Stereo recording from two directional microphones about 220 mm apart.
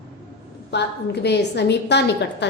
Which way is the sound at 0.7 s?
50° left (ahead or behind).